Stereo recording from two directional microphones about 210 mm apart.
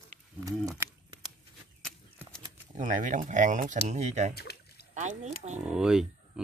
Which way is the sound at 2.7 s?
40° right (ahead or behind).